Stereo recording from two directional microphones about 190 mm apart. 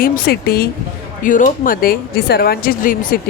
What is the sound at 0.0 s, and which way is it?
Speech, 55° left (ahead or behind).